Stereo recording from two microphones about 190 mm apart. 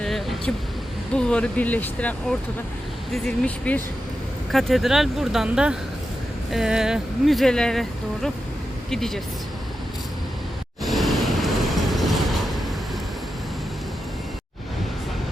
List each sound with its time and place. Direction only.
0.0 s vehicle: centre (ahead or behind)
1.1 s speech: 5° left (ahead or behind)
10.8 s train: centre (ahead or behind)